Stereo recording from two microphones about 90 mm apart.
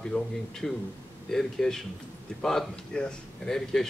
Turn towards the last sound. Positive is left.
turn(degrees=5)  # may be behind; listen again after turning